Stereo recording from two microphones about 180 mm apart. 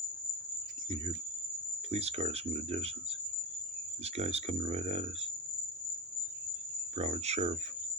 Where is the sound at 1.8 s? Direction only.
35° right (ahead or behind).